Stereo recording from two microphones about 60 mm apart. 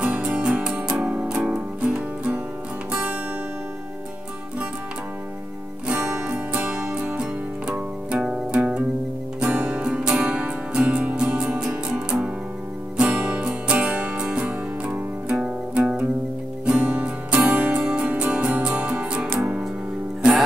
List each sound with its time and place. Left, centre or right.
0.0 s music: centre
5.9 s music: centre
8.2 s music: centre